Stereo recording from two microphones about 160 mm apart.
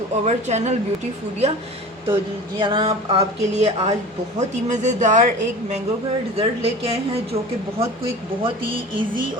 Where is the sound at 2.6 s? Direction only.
30° right (ahead or behind).